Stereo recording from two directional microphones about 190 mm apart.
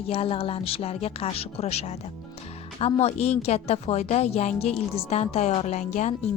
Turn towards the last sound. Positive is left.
turn(degrees=35)  # may be behind; listen again after turning